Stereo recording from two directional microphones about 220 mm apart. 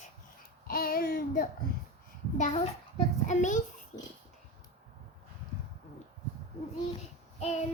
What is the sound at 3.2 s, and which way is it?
Speech, 35° left (ahead or behind).